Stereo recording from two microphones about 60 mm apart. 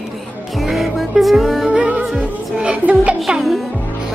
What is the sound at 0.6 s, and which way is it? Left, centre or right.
Music, centre.